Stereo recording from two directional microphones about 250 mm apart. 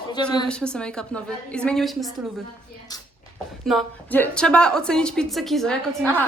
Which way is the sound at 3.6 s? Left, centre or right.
Centre.